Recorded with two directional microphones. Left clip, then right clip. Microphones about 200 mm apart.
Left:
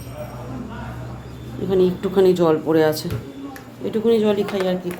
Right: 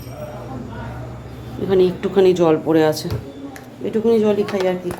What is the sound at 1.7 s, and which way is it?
Speech, 5° right (ahead or behind).